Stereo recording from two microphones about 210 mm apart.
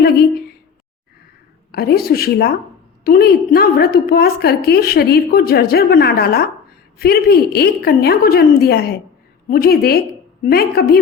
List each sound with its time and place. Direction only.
1.7 s a woman's voice: 45° left (ahead or behind)